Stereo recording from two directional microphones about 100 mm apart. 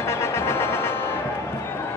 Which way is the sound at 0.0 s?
25° left (ahead or behind).